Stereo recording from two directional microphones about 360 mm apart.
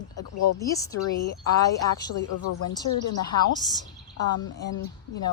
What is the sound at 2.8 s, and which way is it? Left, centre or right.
Speech, left.